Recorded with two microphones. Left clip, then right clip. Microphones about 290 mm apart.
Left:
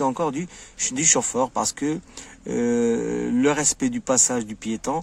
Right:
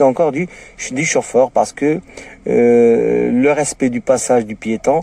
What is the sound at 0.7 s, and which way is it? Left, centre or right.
Speech, left.